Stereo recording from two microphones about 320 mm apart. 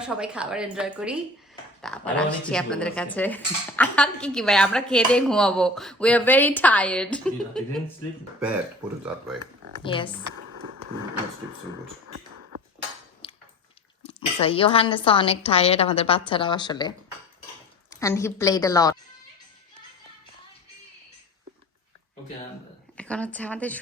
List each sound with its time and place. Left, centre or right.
0.2 s speech: centre
9.8 s a woman's voice: centre
13.2 s tick-tock: centre
14.0 s a woman's voice: centre
18.0 s a woman's voice: centre
23.0 s speech: centre